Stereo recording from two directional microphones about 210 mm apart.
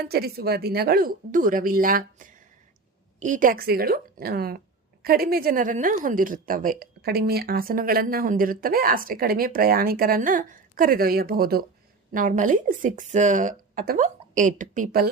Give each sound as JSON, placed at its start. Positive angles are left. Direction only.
{"t": 0.0, "sound": "a woman's voice", "side_deg": -45}